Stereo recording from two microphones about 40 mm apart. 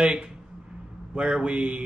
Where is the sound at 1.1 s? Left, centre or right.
Right.